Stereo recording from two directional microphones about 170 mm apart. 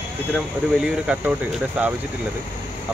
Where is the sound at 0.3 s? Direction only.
5° right (ahead or behind).